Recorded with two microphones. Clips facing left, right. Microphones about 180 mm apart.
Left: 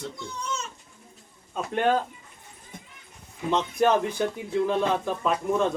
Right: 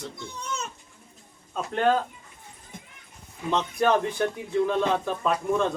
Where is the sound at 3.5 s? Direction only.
20° left (ahead or behind).